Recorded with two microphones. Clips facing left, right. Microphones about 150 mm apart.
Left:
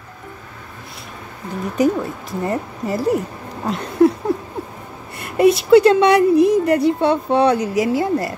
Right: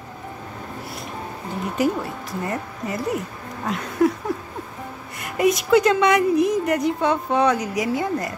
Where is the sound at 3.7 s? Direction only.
30° left (ahead or behind).